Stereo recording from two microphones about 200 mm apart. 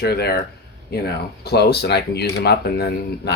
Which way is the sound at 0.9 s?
55° left (ahead or behind).